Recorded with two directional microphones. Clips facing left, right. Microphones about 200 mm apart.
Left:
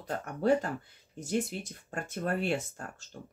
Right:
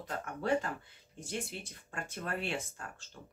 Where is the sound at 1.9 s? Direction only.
40° left (ahead or behind).